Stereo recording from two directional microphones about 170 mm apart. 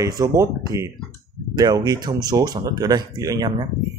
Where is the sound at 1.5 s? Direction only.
25° right (ahead or behind).